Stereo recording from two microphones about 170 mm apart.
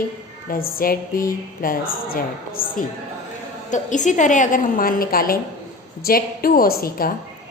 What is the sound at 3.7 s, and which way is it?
A woman's voice, 45° left (ahead or behind).